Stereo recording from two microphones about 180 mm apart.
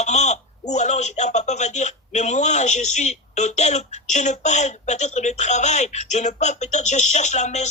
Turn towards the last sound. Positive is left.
turn(degrees=40)  # may be behind; listen again after turning